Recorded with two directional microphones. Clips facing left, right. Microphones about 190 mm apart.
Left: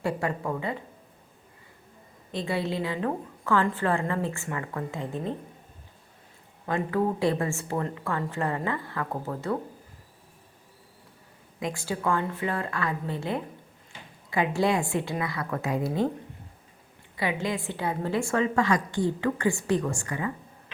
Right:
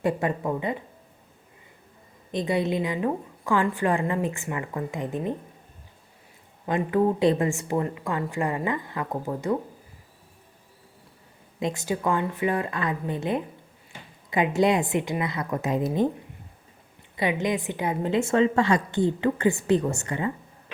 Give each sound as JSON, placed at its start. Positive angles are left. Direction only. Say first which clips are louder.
{"t": 0.0, "sound": "a woman's voice", "louder": "right 3 dB", "side_deg": -20}
{"t": 2.3, "sound": "a woman's voice", "louder": "right 4 dB", "side_deg": -20}
{"t": 6.7, "sound": "a woman's voice", "louder": "right 4 dB", "side_deg": -20}
{"t": 11.6, "sound": "a woman's voice", "louder": "right 3 dB", "side_deg": -20}
{"t": 17.2, "sound": "a woman's voice", "louder": "right 4 dB", "side_deg": -20}